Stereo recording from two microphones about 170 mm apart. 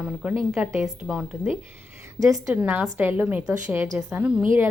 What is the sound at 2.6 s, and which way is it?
Speech, 10° right (ahead or behind).